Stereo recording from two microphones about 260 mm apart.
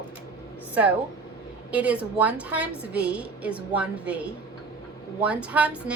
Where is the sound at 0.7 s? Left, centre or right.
Centre.